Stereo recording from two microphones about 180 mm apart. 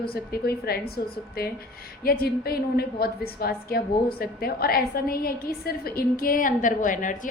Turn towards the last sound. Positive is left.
turn(degrees=45)  # may be behind; listen again after turning